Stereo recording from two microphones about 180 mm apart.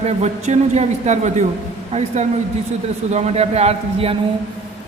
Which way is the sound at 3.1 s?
35° right (ahead or behind).